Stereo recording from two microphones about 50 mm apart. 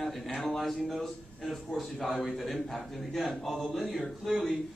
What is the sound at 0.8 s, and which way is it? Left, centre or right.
Speech, centre.